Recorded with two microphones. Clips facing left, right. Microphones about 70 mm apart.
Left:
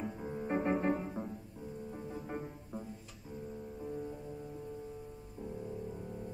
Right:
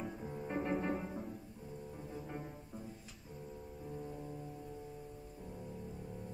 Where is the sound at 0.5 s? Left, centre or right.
Left.